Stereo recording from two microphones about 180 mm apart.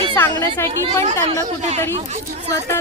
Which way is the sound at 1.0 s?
40° right (ahead or behind).